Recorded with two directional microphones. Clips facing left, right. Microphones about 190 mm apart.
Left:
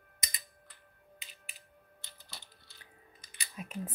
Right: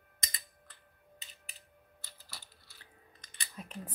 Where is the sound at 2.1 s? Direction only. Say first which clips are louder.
Left 1 dB; 20° left (ahead or behind).